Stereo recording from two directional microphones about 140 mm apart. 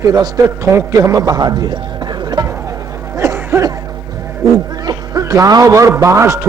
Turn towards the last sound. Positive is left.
turn(degrees=-20)  # may be behind; listen again after turning